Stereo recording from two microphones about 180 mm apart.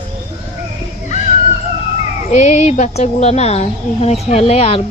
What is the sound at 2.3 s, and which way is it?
A woman's voice, 40° left (ahead or behind).